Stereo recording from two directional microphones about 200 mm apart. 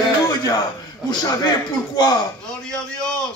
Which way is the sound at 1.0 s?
20° left (ahead or behind).